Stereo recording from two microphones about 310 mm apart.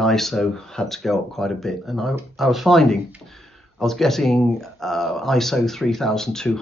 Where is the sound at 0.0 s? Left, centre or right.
Centre.